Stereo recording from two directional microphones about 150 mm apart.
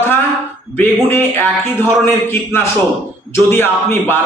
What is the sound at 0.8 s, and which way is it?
A man's voice, 15° left (ahead or behind).